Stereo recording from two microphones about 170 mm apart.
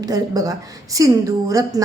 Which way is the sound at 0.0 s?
20° right (ahead or behind).